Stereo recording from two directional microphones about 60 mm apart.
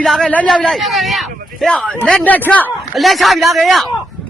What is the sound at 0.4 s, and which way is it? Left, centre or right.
A man's voice, centre.